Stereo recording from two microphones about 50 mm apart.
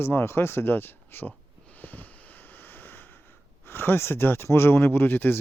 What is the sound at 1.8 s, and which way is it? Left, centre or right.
Sniff, left.